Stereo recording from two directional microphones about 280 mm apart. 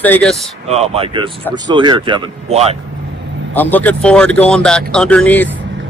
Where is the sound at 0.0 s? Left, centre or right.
Centre.